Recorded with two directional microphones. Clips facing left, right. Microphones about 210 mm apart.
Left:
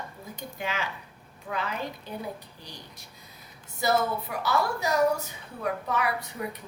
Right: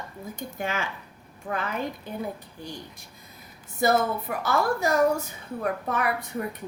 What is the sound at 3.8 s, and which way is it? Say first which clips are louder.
A woman's voice: right 3 dB; 50° right (ahead or behind).